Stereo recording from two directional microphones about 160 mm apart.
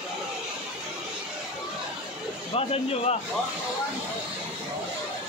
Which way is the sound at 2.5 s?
40° left (ahead or behind).